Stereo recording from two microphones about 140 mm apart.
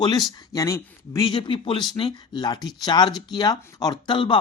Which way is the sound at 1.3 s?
35° left (ahead or behind).